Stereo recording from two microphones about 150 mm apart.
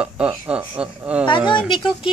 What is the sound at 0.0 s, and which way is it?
Speech, 10° right (ahead or behind).